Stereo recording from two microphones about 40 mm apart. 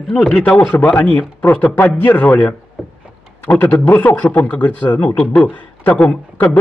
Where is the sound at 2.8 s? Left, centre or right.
Centre.